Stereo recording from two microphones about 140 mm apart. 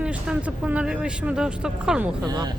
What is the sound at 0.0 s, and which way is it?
Speech, 10° right (ahead or behind).